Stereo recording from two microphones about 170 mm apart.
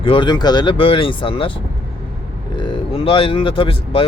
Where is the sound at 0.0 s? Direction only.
30° left (ahead or behind).